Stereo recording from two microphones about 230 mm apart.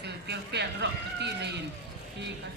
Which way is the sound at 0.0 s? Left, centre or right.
Right.